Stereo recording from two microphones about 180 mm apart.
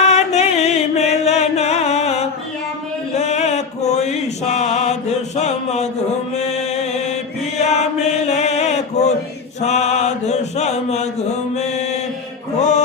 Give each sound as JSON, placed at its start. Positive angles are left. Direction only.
{"t": 0.0, "sound": "music", "side_deg": 40}
{"t": 3.2, "sound": "mantra", "side_deg": 40}
{"t": 6.3, "sound": "music", "side_deg": 40}
{"t": 7.6, "sound": "chant", "side_deg": 40}
{"t": 9.6, "sound": "mantra", "side_deg": 40}
{"t": 12.5, "sound": "music", "side_deg": 40}